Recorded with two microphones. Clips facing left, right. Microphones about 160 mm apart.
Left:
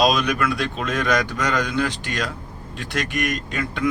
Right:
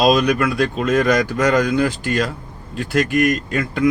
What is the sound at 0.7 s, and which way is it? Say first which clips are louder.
Speech: right 6 dB; centre (ahead or behind).